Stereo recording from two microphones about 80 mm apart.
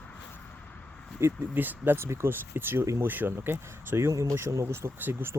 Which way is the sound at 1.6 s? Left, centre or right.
Right.